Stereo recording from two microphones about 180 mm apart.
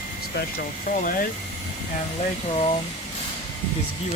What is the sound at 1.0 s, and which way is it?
Speech, 50° left (ahead or behind).